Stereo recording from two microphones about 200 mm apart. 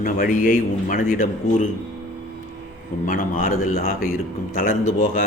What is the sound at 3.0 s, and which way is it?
A man's voice, 40° left (ahead or behind).